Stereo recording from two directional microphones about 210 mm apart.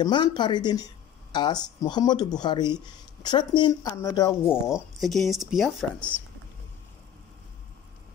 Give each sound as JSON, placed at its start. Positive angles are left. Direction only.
{"t": 0.0, "sound": "speech", "side_deg": 20}
{"t": 4.6, "sound": "speech", "side_deg": 0}